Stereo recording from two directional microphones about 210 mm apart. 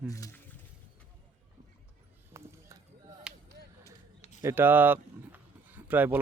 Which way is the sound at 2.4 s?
15° right (ahead or behind).